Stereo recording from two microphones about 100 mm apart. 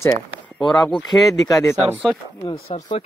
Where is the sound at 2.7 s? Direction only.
85° left.